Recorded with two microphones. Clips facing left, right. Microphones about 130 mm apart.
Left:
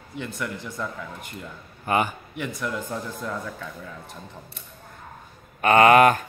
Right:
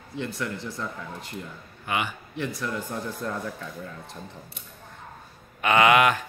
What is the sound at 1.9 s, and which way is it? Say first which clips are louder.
Speech: left 5 dB; 40° left (ahead or behind).